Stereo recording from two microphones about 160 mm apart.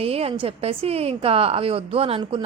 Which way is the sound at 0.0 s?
40° right (ahead or behind).